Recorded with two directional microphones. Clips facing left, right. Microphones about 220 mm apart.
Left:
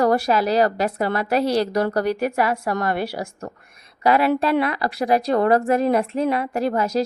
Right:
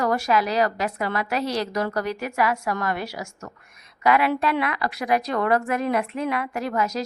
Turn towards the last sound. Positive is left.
turn(degrees=30)  # may be behind; listen again after turning